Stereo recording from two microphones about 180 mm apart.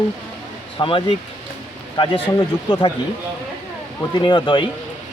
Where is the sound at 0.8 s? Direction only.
30° left (ahead or behind).